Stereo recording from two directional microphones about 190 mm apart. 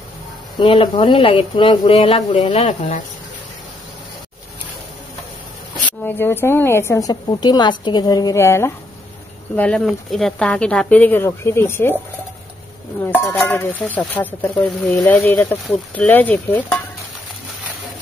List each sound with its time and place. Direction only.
0.6 s speech: 25° left (ahead or behind)
6.0 s a woman's voice: 10° left (ahead or behind)
13.0 s a woman's voice: 10° left (ahead or behind)